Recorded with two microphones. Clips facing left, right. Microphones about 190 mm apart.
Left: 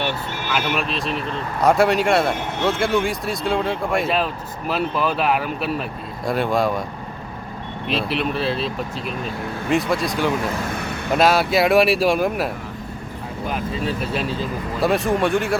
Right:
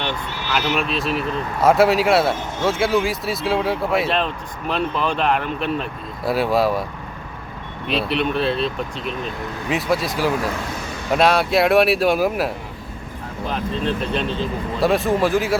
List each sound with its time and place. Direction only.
0.8 s speech: centre (ahead or behind)
2.3 s speech: 65° left (ahead or behind)
2.6 s speech: centre (ahead or behind)
7.9 s speech: centre (ahead or behind)
10.8 s vehicle: 60° left (ahead or behind)
11.1 s speech: centre (ahead or behind)
13.5 s speech: 5° left (ahead or behind)